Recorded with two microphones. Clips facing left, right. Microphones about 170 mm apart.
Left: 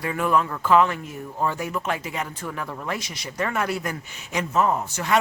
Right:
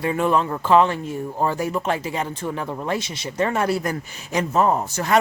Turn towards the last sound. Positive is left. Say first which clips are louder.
# right 3 dB
turn(degrees=-40)  # may be behind; listen again after turning